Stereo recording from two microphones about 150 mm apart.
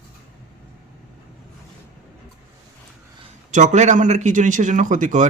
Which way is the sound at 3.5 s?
55° right (ahead or behind).